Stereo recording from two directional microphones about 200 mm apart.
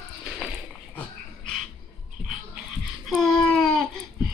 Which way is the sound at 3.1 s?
5° left (ahead or behind).